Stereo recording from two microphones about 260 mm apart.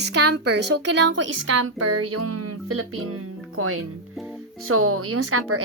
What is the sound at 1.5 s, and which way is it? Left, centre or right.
Speech, right.